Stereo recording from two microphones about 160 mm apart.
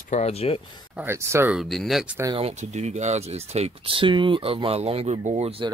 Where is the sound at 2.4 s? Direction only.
45° right (ahead or behind).